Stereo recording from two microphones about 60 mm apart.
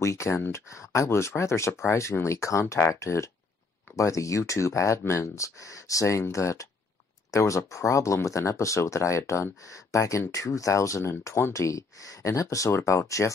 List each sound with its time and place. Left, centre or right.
0.0 s speech: left
2.6 s speech: left